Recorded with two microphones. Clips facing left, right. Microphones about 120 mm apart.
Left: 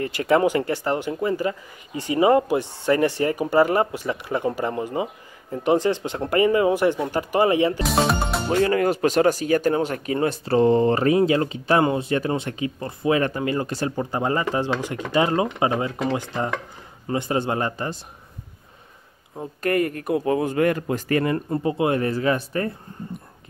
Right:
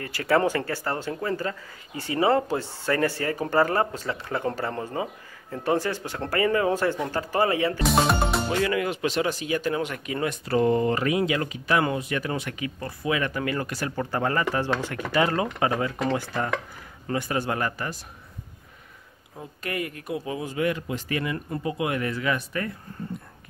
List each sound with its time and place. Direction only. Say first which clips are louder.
0.0 s speech: left 4 dB; 25° left (ahead or behind)
7.8 s speech: left 1 dB; centre (ahead or behind)
8.5 s speech: left 5 dB; 40° left (ahead or behind)
19.6 s speech: left 10 dB; 50° left (ahead or behind)
21.5 s speech: left 6 dB; 30° left (ahead or behind)